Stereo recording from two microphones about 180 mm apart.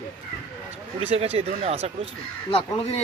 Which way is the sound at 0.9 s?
35° right (ahead or behind).